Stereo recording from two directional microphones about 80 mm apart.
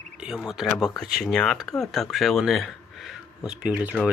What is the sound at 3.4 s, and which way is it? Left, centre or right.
Speech, centre.